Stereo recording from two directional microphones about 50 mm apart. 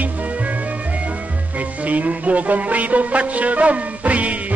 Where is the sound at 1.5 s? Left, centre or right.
Right.